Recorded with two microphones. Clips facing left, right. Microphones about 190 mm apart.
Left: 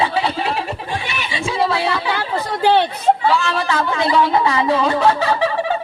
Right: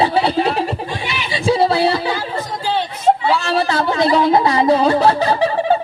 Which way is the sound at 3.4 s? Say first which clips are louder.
Right 3 dB; 35° right (ahead or behind).